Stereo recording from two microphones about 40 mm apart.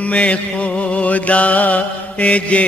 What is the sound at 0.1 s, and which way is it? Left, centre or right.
Music, left.